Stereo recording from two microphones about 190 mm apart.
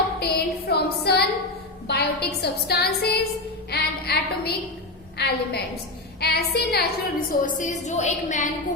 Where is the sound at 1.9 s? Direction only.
60° left (ahead or behind).